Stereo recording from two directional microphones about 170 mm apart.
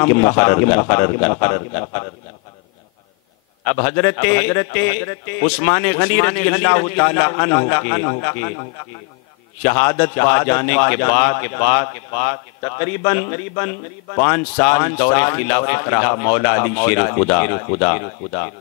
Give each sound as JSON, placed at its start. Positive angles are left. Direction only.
{"t": 0.0, "sound": "a man's voice", "side_deg": 20}
{"t": 3.6, "sound": "a man's voice", "side_deg": 20}
{"t": 9.6, "sound": "a man's voice", "side_deg": 15}